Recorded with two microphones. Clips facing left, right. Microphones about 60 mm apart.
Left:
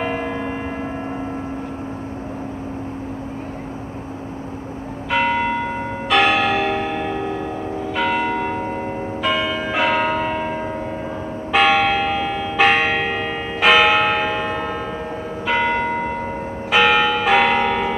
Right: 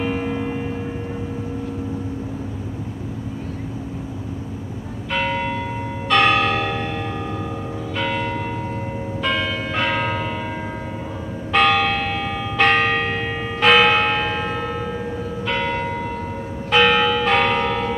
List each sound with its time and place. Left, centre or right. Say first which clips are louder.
0.0 s a sound: even; centre
5.1 s church bell: left 4 dB; centre
8.3 s church bell: left 4 dB; left
9.2 s church bell: left 2 dB; centre
11.5 s church bell: left 2 dB; centre
16.7 s church bell: even; centre